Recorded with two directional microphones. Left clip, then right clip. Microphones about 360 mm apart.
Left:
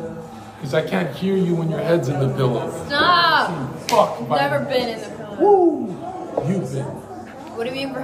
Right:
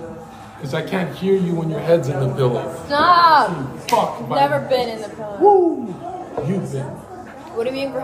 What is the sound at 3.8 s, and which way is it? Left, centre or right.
Speech, centre.